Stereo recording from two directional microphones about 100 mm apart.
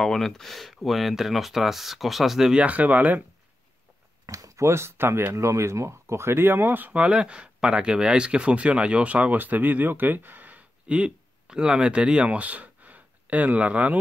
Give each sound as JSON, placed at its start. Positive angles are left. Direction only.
{"t": 0.0, "sound": "speech", "side_deg": 5}
{"t": 4.3, "sound": "speech", "side_deg": -30}